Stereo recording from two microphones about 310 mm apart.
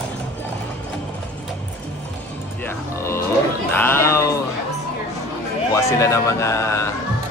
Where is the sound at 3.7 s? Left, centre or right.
Centre.